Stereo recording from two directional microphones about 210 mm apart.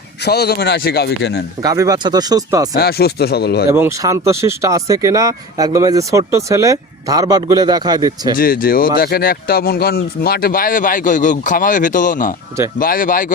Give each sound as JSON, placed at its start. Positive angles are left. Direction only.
{"t": 0.2, "sound": "speech", "side_deg": 50}
{"t": 1.6, "sound": "speech", "side_deg": -15}
{"t": 2.7, "sound": "speech", "side_deg": 50}
{"t": 3.7, "sound": "speech", "side_deg": -10}
{"t": 8.4, "sound": "speech", "side_deg": 45}